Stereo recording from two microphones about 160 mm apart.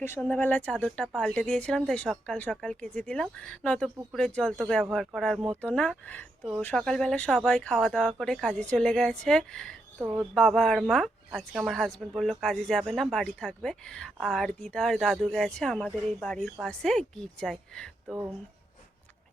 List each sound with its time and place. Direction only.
0.2 s a woman's voice: 10° left (ahead or behind)
10.0 s a sound: 15° right (ahead or behind)
10.3 s a woman's voice: 5° left (ahead or behind)